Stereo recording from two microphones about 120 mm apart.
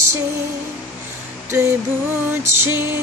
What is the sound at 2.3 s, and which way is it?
Music, 20° right (ahead or behind).